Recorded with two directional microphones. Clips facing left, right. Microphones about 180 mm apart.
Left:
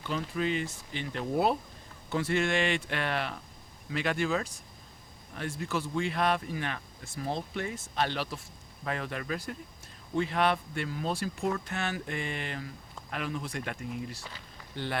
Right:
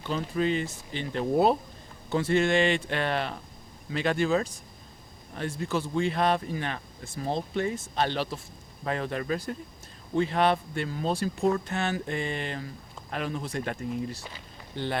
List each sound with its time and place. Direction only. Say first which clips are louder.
0.1 s speech: right 4 dB; 35° right (ahead or behind)
14.2 s speech: right 3 dB; 20° right (ahead or behind)